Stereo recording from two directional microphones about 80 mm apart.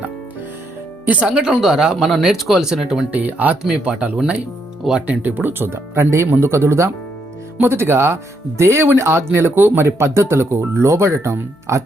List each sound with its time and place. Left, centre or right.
1.0 s speech: centre
3.2 s speech: centre; by 11.8 s right